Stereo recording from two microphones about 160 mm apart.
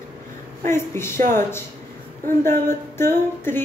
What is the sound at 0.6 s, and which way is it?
Speech, 15° left (ahead or behind).